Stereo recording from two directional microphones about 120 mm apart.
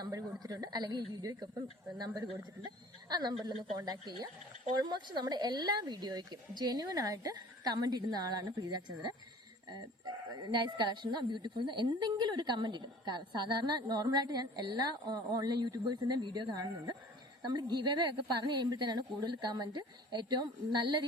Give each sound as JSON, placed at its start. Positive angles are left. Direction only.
{"t": 0.0, "sound": "a woman's voice", "side_deg": -30}
{"t": 10.5, "sound": "a woman's voice", "side_deg": -35}